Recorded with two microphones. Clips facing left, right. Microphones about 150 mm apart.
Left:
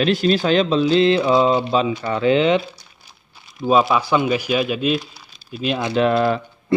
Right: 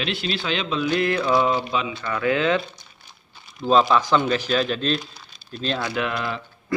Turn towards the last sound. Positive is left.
turn(degrees=30)  # may be behind; listen again after turning